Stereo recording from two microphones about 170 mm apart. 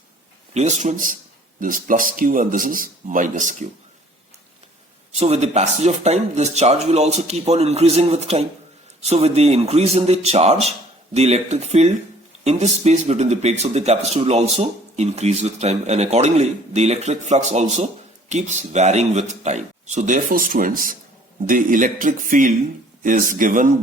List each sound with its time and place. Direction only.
0.5 s speech: 40° right (ahead or behind)
5.1 s speech: 40° right (ahead or behind)